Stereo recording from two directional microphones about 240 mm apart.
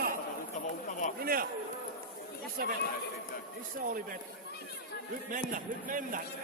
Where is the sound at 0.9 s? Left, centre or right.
Left.